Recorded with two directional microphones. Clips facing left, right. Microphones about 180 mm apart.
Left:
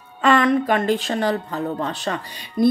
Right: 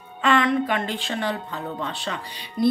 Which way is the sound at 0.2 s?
40° left (ahead or behind).